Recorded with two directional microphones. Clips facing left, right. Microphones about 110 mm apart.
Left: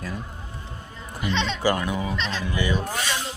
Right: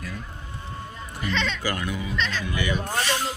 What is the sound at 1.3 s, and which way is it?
Speech, 30° left (ahead or behind).